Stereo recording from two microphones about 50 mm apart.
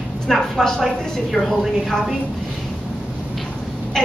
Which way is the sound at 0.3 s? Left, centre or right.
Centre.